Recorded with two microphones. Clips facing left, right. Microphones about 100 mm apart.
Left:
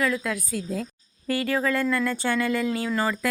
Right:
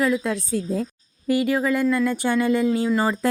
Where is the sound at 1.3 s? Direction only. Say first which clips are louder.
Right 4 dB; 15° right (ahead or behind).